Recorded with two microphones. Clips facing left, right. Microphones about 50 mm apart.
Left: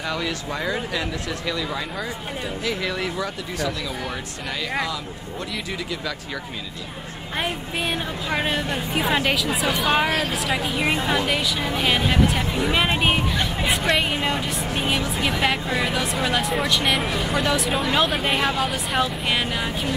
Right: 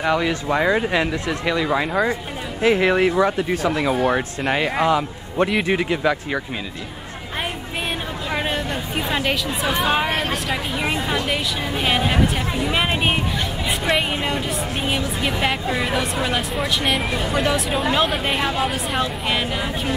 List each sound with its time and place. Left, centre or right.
0.0 s speech: right
8.3 s a woman's voice: centre